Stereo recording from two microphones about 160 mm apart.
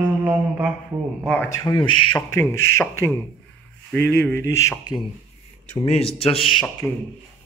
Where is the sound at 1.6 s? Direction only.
25° left (ahead or behind).